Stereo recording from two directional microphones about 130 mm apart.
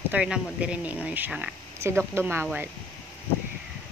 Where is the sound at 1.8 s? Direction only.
20° right (ahead or behind).